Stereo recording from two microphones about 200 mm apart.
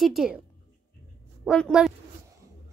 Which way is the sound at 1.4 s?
Centre (ahead or behind).